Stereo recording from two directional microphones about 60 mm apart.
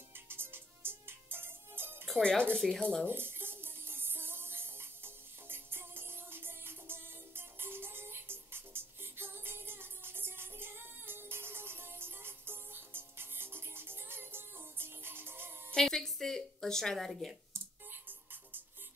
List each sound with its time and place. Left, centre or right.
0.1 s music: right
2.5 s speech: centre
3.1 s music: right
15.7 s a sound: centre
17.9 s music: right